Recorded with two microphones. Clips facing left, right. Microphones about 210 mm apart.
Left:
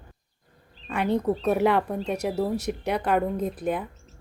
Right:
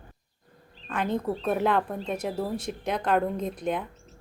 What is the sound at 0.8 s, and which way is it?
Speech, 10° left (ahead or behind).